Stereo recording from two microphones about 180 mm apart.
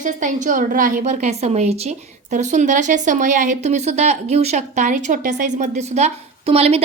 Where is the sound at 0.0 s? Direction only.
45° right (ahead or behind).